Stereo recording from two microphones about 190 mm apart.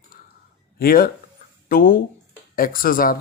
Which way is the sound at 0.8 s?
50° left (ahead or behind).